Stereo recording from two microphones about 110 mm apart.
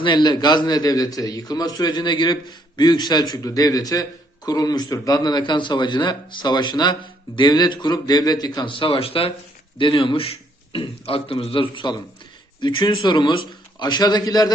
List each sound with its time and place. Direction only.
0.0 s a man's voice: 45° left (ahead or behind)